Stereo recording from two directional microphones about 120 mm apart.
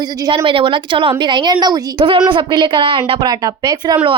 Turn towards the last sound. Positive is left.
turn(degrees=-35)  # may be behind; listen again after turning